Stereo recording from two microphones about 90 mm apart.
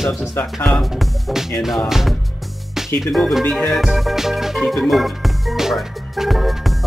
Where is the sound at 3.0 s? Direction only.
Centre (ahead or behind).